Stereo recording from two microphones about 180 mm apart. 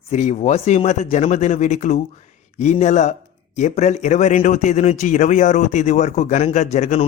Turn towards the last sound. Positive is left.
turn(degrees=40)  # may be behind; listen again after turning